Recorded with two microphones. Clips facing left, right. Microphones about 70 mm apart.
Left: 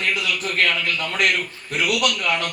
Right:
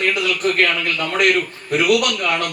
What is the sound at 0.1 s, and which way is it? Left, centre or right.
A man's voice, right.